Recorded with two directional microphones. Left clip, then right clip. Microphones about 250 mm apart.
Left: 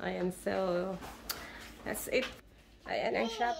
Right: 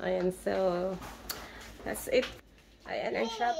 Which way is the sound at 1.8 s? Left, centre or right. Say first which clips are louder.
Right 4 dB; centre.